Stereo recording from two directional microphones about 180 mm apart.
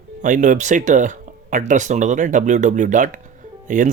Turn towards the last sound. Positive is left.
turn(degrees=-45)  # may be behind; listen again after turning